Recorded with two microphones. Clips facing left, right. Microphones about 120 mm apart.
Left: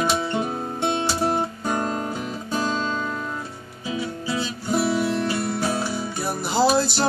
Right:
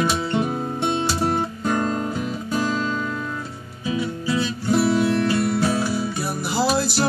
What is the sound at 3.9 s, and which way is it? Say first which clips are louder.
Music: right 3 dB; 20° left (ahead or behind).